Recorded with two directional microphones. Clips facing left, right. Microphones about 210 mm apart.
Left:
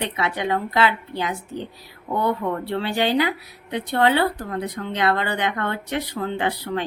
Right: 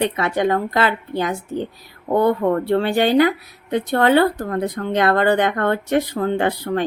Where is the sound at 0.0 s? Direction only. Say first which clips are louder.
Right 6 dB; 45° right (ahead or behind).